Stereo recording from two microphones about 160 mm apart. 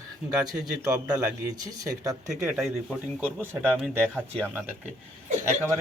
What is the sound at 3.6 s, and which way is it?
Speech, centre (ahead or behind).